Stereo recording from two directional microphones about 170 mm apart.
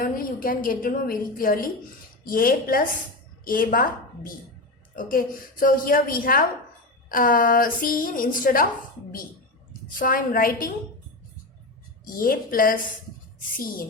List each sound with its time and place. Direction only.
0.0 s a woman's voice: 55° left (ahead or behind)
10.0 s a woman's voice: 55° left (ahead or behind)
12.0 s a woman's voice: 55° left (ahead or behind)